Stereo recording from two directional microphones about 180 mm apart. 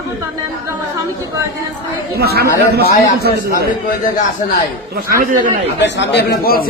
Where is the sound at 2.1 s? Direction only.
60° right (ahead or behind).